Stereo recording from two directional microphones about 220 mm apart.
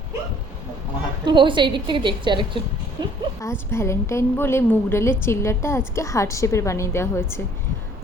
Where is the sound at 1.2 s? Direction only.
20° right (ahead or behind).